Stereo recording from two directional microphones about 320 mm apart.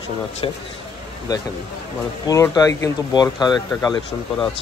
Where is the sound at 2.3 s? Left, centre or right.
Centre.